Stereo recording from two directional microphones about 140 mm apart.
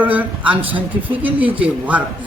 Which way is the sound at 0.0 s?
10° right (ahead or behind).